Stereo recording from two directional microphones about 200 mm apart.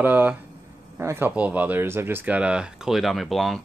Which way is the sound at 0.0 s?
10° right (ahead or behind).